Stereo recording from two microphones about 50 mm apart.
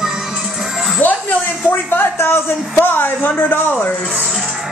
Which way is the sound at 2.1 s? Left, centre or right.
Left.